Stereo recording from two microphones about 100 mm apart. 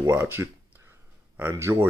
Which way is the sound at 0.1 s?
20° right (ahead or behind).